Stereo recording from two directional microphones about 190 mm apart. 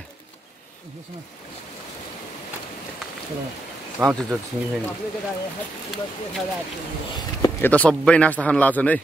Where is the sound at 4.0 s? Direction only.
15° right (ahead or behind).